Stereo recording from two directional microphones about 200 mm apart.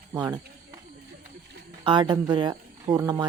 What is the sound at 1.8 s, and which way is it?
Speech, 20° right (ahead or behind).